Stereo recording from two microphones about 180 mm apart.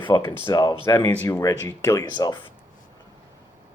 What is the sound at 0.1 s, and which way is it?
Speech, 20° left (ahead or behind).